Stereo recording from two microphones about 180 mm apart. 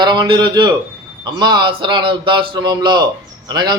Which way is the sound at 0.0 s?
25° right (ahead or behind).